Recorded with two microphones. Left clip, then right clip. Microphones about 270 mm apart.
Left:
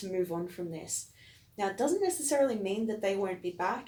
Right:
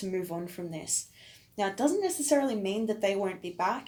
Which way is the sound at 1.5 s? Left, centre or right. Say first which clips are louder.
Right 2 dB; right.